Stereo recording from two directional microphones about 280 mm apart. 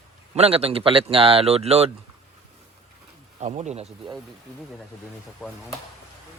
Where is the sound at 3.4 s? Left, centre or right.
Right.